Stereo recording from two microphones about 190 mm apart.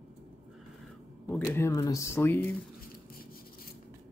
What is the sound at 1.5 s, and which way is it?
Speech, 15° left (ahead or behind).